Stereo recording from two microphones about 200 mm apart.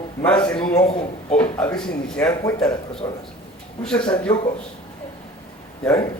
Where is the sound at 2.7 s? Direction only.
25° left (ahead or behind).